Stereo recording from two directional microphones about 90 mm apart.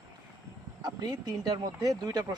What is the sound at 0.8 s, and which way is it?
Speech, 50° right (ahead or behind).